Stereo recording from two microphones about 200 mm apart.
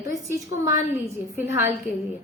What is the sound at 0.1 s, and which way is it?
A woman's voice, 15° right (ahead or behind).